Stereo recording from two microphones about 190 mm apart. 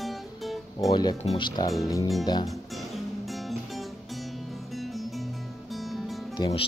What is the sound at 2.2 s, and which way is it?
Speech, 20° left (ahead or behind).